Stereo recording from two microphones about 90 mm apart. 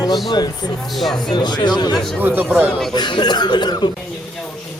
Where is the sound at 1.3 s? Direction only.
50° left (ahead or behind).